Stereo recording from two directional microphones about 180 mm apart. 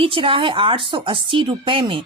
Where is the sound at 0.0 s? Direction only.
30° right (ahead or behind).